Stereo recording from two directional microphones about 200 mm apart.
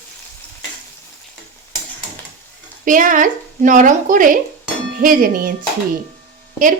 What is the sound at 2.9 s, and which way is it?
Stir, 40° right (ahead or behind).